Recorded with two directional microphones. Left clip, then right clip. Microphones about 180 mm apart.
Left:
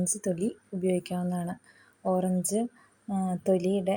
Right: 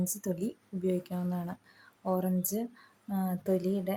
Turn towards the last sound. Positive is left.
turn(degrees=15)  # may be behind; listen again after turning